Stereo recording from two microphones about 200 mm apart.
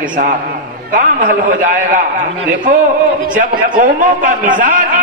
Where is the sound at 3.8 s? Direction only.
40° right (ahead or behind).